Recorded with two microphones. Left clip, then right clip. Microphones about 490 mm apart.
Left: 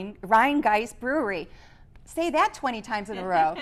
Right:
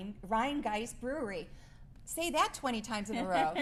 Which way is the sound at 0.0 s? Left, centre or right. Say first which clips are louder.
Left 13 dB; left.